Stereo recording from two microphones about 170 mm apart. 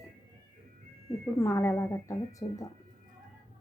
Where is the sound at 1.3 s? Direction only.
15° left (ahead or behind).